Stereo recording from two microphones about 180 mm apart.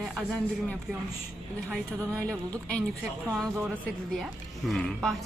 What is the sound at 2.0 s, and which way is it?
Speech, 15° right (ahead or behind).